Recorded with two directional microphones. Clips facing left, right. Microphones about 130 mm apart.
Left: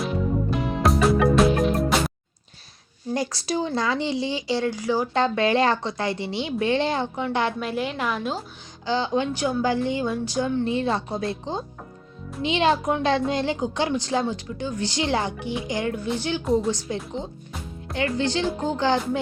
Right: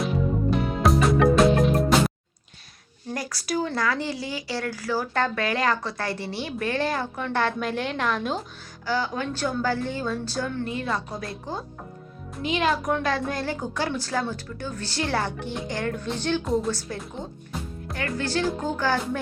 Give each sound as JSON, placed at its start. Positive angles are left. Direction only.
{"t": 0.8, "sound": "music", "side_deg": 0}
{"t": 3.2, "sound": "a woman's voice", "side_deg": 25}
{"t": 7.3, "sound": "a woman's voice", "side_deg": 10}
{"t": 8.9, "sound": "a woman's voice", "side_deg": 25}
{"t": 16.4, "sound": "a woman's voice", "side_deg": 0}
{"t": 16.6, "sound": "a woman's voice", "side_deg": 20}